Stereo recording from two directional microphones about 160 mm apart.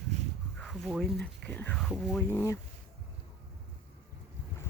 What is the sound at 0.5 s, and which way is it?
Speech, centre (ahead or behind).